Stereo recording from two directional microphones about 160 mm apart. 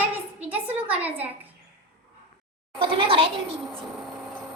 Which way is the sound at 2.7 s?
35° right (ahead or behind).